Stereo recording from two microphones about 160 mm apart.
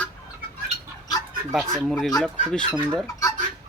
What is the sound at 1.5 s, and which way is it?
Speech, centre (ahead or behind).